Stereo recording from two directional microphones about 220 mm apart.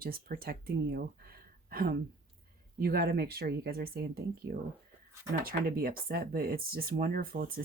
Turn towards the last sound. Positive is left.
turn(degrees=-40)  # may be behind; listen again after turning